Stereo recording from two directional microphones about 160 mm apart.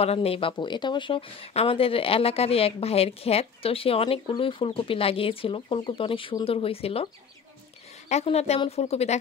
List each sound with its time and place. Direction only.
0.0 s speech: 40° left (ahead or behind)
8.1 s speech: 45° left (ahead or behind)